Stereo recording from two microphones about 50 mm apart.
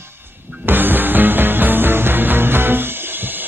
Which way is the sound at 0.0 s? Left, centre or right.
Right.